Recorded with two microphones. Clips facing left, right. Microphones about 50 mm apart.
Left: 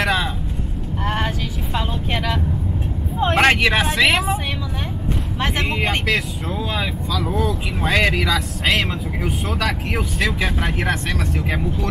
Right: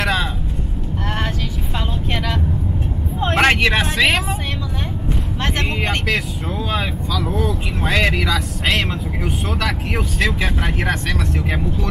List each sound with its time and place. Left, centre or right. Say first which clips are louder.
0.0 s vehicle: even; centre
1.0 s sheep: left 2 dB; centre
3.2 s a sound: even; centre
5.4 s speech: left 1 dB; centre